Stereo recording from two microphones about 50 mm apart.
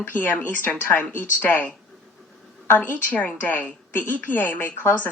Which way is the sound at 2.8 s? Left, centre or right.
Left.